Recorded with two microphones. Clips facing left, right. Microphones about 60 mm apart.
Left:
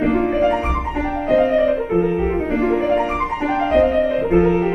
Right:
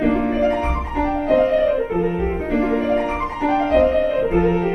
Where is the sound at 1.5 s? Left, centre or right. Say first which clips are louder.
Left 1 dB; left.